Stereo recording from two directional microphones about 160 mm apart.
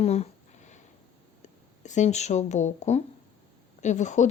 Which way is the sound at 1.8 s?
45° left (ahead or behind).